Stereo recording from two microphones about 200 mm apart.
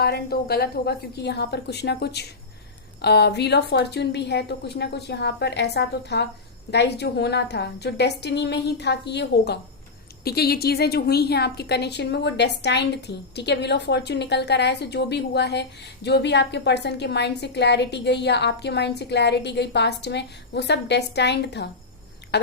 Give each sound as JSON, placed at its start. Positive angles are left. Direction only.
{"t": 0.0, "sound": "a woman's voice", "side_deg": 50}